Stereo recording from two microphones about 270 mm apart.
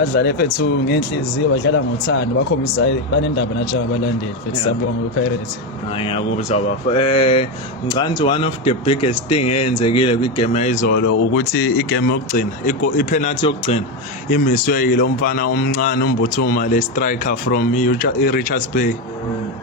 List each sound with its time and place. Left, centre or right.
0.0 s speech: left
6.0 s speech: left
10.9 s speech: left